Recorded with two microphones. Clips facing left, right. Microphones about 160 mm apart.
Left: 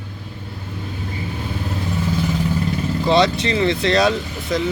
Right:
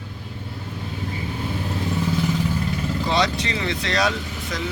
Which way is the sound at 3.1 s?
25° left (ahead or behind).